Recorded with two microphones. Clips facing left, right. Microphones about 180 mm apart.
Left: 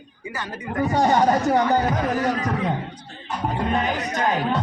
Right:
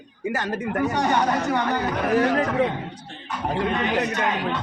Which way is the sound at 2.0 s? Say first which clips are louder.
Right 3 dB; 80° right.